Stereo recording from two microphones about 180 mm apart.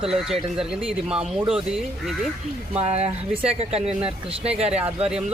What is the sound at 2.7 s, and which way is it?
Speech, 35° right (ahead or behind).